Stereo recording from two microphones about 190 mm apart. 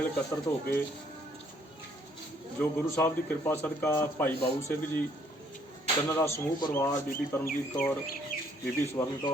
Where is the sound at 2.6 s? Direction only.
10° left (ahead or behind).